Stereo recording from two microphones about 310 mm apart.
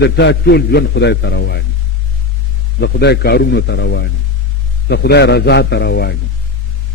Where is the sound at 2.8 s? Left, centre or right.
Left.